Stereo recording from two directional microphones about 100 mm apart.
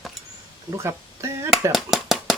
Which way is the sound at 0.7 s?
25° right (ahead or behind).